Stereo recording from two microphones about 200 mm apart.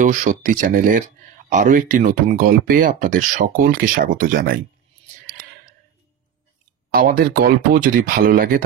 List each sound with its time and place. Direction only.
0.0 s speech: 40° right (ahead or behind)
6.9 s speech: 50° right (ahead or behind)